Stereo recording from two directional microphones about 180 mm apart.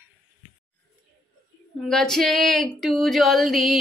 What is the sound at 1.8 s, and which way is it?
Female singing, centre (ahead or behind).